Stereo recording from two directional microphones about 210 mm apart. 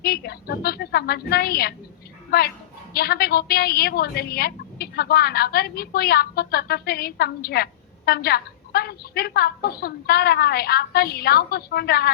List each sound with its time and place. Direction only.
0.0 s a woman's voice: 50° left (ahead or behind)